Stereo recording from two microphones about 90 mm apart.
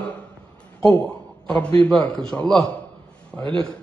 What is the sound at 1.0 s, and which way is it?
A man's voice, 10° left (ahead or behind).